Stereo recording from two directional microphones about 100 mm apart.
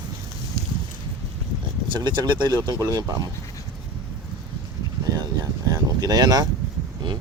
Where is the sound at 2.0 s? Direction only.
45° right (ahead or behind).